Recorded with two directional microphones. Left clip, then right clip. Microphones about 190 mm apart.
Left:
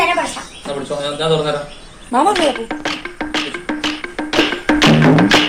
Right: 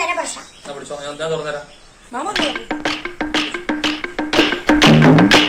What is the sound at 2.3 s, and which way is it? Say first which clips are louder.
Music: left 5 dB; centre (ahead or behind).